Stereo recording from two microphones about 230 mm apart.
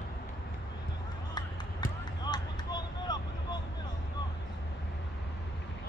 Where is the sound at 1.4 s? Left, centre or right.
Centre.